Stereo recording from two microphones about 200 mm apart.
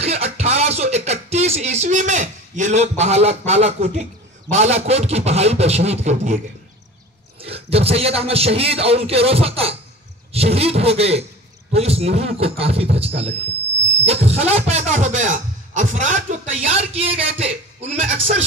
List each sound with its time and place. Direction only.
0.0 s speech: 30° right (ahead or behind)